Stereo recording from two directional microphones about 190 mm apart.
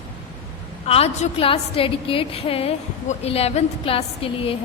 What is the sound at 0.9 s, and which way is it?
A woman's voice, 30° left (ahead or behind).